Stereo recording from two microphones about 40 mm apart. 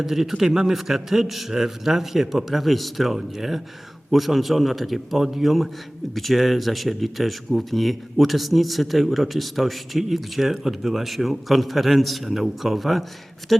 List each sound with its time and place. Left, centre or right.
0.0 s a man's voice: centre